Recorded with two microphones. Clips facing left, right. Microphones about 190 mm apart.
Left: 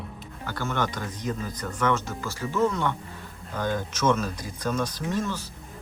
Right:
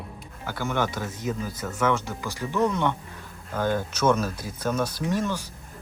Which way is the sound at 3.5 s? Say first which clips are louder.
Right 3 dB; 5° right (ahead or behind).